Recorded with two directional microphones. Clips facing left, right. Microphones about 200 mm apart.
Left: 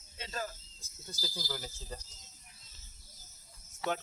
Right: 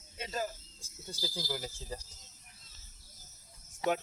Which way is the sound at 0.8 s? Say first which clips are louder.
Right 3 dB; 30° right (ahead or behind).